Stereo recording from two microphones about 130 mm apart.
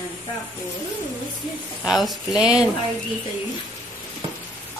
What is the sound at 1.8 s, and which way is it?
Speech, centre (ahead or behind).